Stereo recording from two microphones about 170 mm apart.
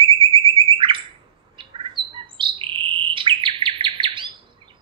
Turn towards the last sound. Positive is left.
turn(degrees=-30)  # may be behind; listen again after turning